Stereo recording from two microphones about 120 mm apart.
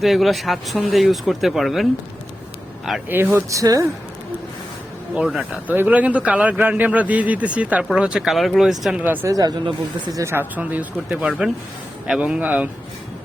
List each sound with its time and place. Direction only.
0.0 s speech: centre (ahead or behind)
3.3 s speech: 25° right (ahead or behind)
5.1 s a man's voice: 5° right (ahead or behind)
9.2 s a man's voice: 30° right (ahead or behind); by 12.6 s 10° right (ahead or behind)